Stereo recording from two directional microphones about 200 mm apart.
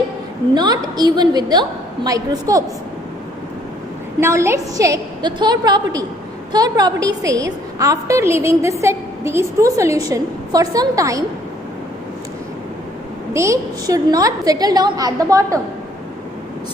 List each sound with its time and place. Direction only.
0.5 s a woman's voice: 20° right (ahead or behind)
4.2 s a woman's voice: 15° right (ahead or behind)
13.3 s a woman's voice: 15° right (ahead or behind)